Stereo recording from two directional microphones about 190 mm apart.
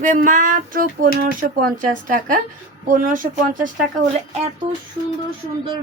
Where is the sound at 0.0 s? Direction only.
40° right (ahead or behind).